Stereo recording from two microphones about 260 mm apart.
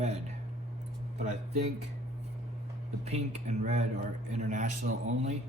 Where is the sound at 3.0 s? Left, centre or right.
Right.